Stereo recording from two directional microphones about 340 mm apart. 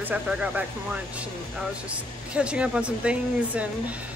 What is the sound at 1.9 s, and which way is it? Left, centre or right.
Speech, centre.